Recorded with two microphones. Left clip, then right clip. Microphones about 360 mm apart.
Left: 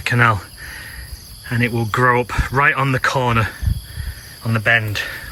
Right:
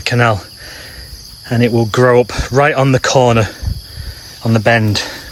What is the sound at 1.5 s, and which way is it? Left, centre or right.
Speech, centre.